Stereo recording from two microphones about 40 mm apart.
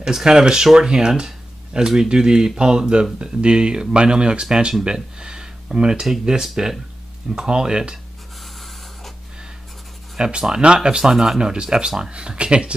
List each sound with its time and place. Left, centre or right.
0.0 s speech: centre
10.1 s speech: centre